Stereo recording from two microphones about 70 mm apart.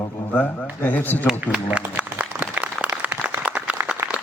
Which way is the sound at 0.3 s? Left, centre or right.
Left.